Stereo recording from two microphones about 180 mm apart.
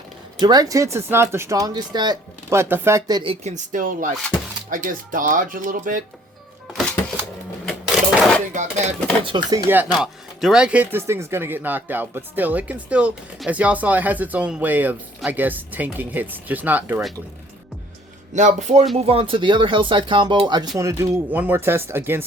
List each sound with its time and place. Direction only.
0.3 s speech: 20° right (ahead or behind)
3.4 s speech: 45° right (ahead or behind)
7.6 s cash register: 5° left (ahead or behind)
8.5 s speech: 40° right (ahead or behind)
9.2 s speech: 25° right (ahead or behind)
9.7 s speech: 5° right (ahead or behind)
18.3 s speech: 40° right (ahead or behind)
20.7 s speech: 15° right (ahead or behind)